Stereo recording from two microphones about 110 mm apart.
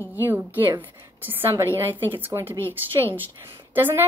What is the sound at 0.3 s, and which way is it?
Speech, 15° right (ahead or behind).